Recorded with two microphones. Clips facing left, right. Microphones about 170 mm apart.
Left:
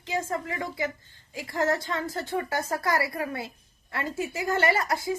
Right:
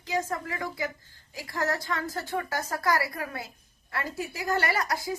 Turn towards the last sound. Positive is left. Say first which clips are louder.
# left 4 dB
turn(degrees=25)  # may be behind; listen again after turning